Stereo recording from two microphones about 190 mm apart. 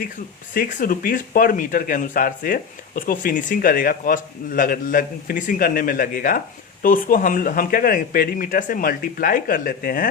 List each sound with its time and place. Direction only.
0.5 s speech: 45° left (ahead or behind)